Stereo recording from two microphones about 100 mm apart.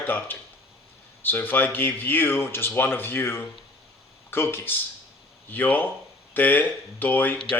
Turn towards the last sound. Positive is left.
turn(degrees=20)  # may be behind; listen again after turning